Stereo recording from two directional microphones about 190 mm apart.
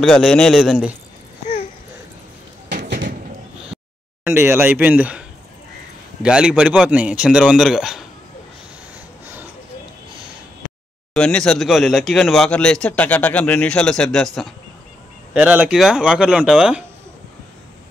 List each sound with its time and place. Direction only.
0.0 s speech: 5° left (ahead or behind)
2.9 s a sound: 45° right (ahead or behind)
4.2 s speech: 15° right (ahead or behind)
6.2 s speech: 5° right (ahead or behind)
9.2 s a sound: 10° right (ahead or behind)
11.1 s speech: 5° left (ahead or behind)